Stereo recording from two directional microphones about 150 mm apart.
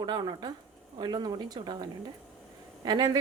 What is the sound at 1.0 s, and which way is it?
Speech, 30° right (ahead or behind).